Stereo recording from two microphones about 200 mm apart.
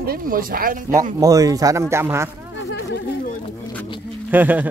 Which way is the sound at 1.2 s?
15° right (ahead or behind).